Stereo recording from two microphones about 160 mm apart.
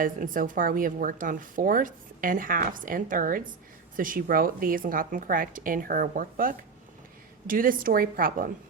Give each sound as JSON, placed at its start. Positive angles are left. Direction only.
{"t": 0.0, "sound": "speech", "side_deg": -60}